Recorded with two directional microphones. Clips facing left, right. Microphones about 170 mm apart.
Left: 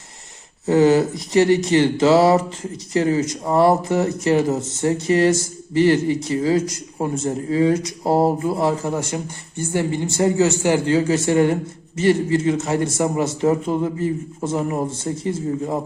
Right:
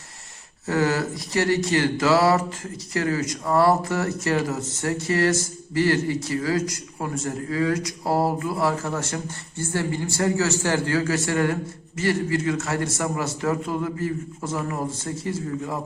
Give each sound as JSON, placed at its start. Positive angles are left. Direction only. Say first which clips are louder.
{"t": 0.6, "sound": "a man's voice", "louder": "left 8 dB", "side_deg": 20}